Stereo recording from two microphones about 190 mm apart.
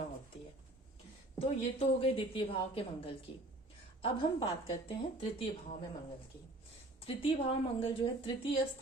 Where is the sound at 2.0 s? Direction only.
30° left (ahead or behind).